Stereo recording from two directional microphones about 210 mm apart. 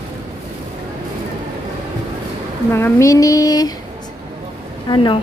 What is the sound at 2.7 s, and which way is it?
Speech, 15° left (ahead or behind).